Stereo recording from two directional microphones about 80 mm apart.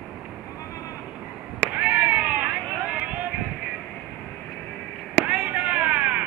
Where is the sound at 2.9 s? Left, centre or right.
Centre.